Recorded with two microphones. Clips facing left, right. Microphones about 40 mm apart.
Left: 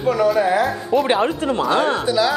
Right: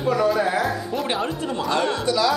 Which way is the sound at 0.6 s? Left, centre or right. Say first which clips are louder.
Left 6 dB; centre.